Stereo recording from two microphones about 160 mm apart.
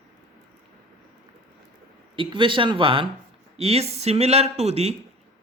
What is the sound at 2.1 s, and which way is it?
Speech, 30° right (ahead or behind).